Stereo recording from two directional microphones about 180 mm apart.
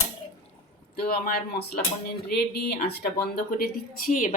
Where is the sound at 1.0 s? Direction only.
55° left (ahead or behind).